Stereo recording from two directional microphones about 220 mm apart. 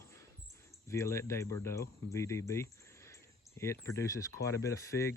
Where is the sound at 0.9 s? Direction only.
15° left (ahead or behind).